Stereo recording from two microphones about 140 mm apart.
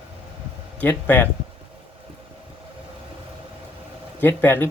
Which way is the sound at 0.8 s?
10° left (ahead or behind).